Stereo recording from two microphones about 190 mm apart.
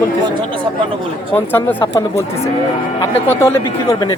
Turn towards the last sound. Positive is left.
turn(degrees=15)  # may be behind; listen again after turning